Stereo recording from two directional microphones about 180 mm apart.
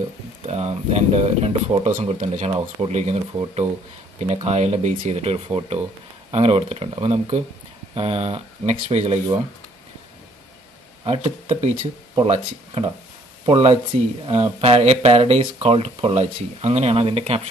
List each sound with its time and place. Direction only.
0.5 s speech: 35° right (ahead or behind)
11.1 s speech: 35° right (ahead or behind)